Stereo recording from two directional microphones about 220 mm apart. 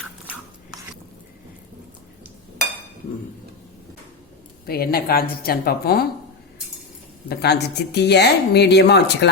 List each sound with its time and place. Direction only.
4.6 s speech: 45° left (ahead or behind)
7.3 s speech: 50° left (ahead or behind)